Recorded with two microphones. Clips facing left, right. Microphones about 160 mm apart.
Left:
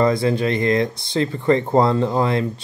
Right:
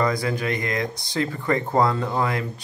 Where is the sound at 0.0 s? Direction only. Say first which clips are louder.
Left 6 dB; 25° left (ahead or behind).